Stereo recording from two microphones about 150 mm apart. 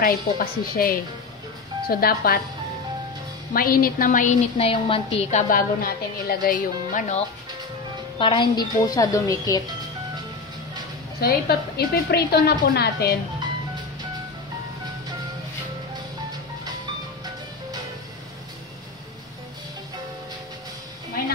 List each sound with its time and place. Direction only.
0.0 s a woman's voice: 75° left (ahead or behind)
1.9 s a woman's voice: 90° left
3.5 s a woman's voice: 75° left (ahead or behind); by 4.4 s 60° left (ahead or behind)
4.6 s a woman's voice: 40° left (ahead or behind)
5.5 s a woman's voice: 85° left; by 7.2 s 55° left (ahead or behind)
8.2 s a woman's voice: 35° left (ahead or behind)
11.1 s a woman's voice: 90° left